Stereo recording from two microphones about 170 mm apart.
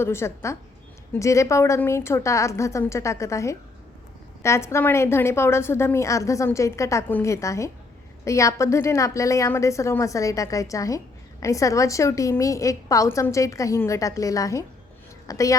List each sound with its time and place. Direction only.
0.0 s a woman's voice: 15° left (ahead or behind)